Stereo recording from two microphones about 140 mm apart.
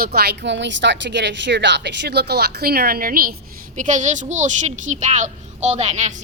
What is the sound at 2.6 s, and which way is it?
Speech, 90° right.